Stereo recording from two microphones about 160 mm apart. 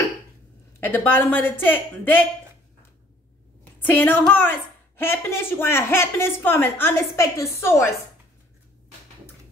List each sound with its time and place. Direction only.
0.7 s speech: 10° left (ahead or behind)
3.8 s speech: 10° left (ahead or behind)